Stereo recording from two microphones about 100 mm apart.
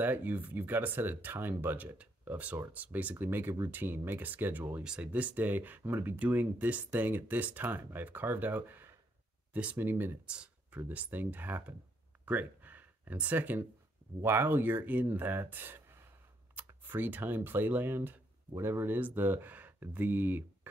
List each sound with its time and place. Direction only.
0.0 s speech: 20° right (ahead or behind)
10.3 s a sound: 10° right (ahead or behind)
10.8 s speech: 15° right (ahead or behind)